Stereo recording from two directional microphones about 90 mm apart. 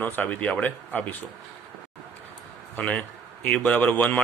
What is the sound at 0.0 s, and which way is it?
Speech, 20° left (ahead or behind).